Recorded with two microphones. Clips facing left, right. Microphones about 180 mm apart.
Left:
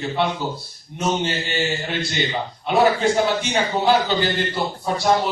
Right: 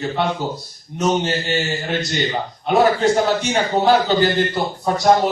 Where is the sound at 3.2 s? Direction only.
45° right (ahead or behind).